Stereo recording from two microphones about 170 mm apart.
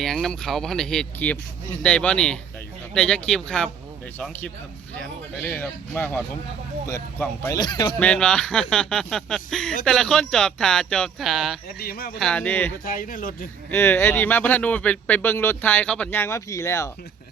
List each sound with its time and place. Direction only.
0.0 s speech: 5° left (ahead or behind); by 7.9 s 25° left (ahead or behind)
7.9 s speech: 5° left (ahead or behind)
11.8 s speech: 60° left (ahead or behind)
12.2 s speech: 5° left (ahead or behind)
12.8 s speech: 55° left (ahead or behind)
13.7 s speech: 15° left (ahead or behind)